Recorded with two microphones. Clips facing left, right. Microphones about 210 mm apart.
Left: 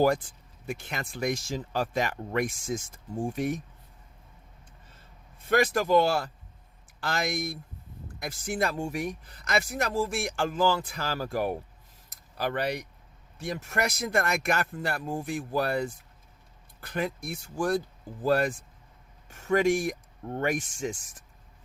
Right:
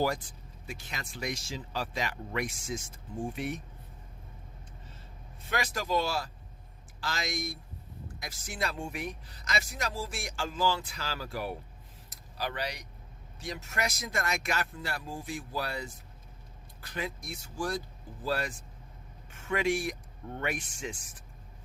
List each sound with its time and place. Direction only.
0.7 s speech: 55° left (ahead or behind)
5.5 s speech: 55° left (ahead or behind)